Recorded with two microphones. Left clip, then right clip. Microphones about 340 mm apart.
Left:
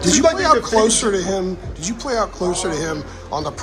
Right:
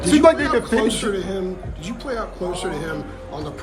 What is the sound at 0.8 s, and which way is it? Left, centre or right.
Speech, centre.